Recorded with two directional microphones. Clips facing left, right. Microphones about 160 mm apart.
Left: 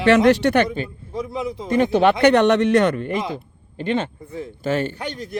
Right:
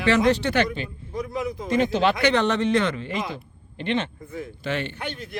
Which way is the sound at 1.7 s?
55° left (ahead or behind).